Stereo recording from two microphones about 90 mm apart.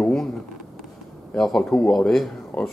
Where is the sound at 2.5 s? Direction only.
15° left (ahead or behind).